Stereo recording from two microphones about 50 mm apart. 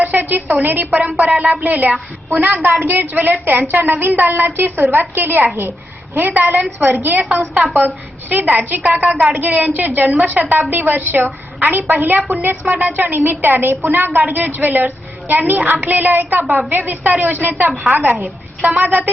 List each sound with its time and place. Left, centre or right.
0.0 s a woman's voice: right
18.9 s a woman's voice: right